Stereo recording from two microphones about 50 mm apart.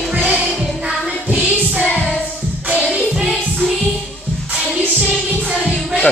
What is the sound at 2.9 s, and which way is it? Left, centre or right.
Music, centre.